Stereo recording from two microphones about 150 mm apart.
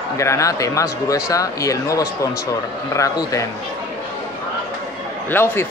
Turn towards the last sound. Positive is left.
turn(degrees=15)  # may be behind; listen again after turning